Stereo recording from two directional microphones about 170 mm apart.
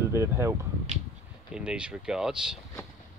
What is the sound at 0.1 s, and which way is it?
Speech, 15° right (ahead or behind).